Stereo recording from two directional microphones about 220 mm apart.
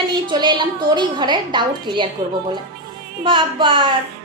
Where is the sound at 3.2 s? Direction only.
20° right (ahead or behind).